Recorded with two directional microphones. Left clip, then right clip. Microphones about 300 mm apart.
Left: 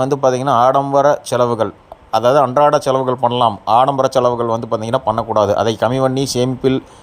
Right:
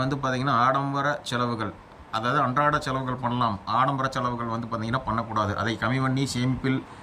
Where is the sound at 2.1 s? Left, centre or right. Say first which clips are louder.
Left 13 dB; centre.